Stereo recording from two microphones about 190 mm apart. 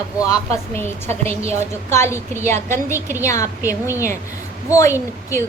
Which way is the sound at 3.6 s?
10° right (ahead or behind).